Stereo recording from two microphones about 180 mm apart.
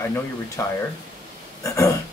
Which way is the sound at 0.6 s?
15° left (ahead or behind).